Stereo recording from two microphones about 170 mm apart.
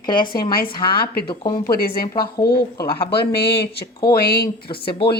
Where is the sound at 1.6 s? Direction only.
60° left (ahead or behind).